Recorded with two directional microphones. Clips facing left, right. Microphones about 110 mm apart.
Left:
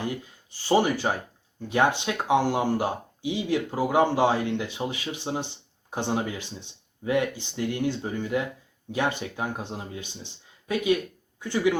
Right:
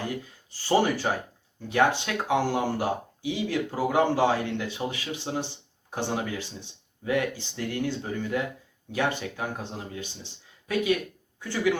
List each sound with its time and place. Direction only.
0.0 s speech: 15° left (ahead or behind)